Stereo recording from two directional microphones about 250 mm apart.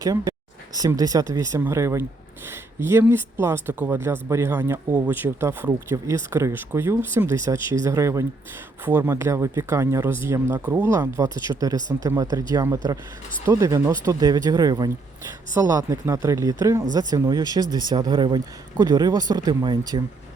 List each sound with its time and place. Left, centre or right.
0.0 s speech: centre